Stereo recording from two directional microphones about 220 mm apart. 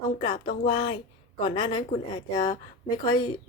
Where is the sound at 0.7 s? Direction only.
20° left (ahead or behind).